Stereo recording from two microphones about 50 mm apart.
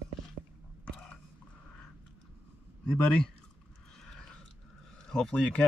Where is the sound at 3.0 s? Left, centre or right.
Centre.